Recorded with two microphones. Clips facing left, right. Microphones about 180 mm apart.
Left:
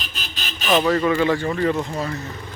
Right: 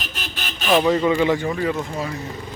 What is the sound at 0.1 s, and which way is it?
Vehicle, 60° right (ahead or behind).